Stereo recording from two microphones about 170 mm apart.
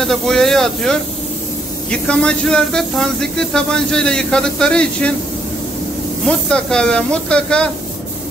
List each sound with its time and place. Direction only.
0.0 s speech: centre (ahead or behind)
6.2 s speech: 5° left (ahead or behind)